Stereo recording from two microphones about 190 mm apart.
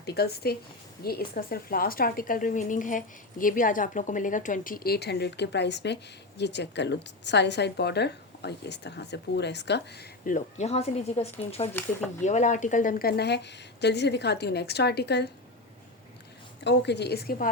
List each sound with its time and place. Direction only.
0.0 s a woman's voice: 55° left (ahead or behind)
10.2 s speech: 40° left (ahead or behind)
11.7 s speech: 10° left (ahead or behind)
12.2 s a woman's voice: 40° left (ahead or behind); by 15.3 s 60° left (ahead or behind)
16.6 s a woman's voice: 65° left (ahead or behind)